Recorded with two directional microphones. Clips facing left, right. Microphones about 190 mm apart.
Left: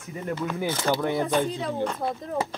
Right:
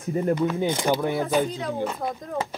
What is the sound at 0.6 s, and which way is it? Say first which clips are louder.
Speech: right 2 dB; 20° right (ahead or behind).